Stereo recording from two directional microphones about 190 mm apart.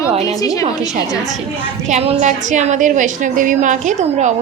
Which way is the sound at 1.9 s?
35° right (ahead or behind).